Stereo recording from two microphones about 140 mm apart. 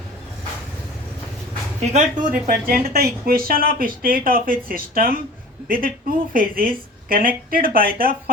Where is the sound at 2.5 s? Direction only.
90° right.